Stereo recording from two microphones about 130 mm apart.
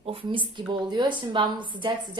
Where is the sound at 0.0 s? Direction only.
40° right (ahead or behind).